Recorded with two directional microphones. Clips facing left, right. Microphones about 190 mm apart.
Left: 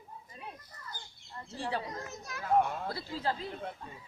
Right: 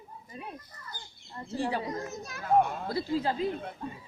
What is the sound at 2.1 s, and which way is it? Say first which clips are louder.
Speech: right 4 dB; 30° right (ahead or behind).